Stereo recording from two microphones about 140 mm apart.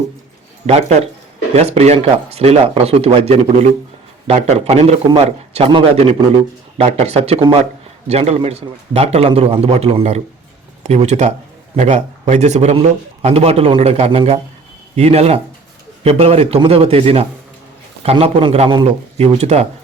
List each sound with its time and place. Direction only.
0.7 s speech: 50° right (ahead or behind)